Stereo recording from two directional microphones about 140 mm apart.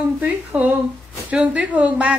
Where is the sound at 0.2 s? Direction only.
10° right (ahead or behind).